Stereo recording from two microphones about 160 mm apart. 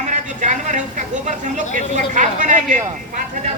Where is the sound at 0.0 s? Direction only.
50° right (ahead or behind).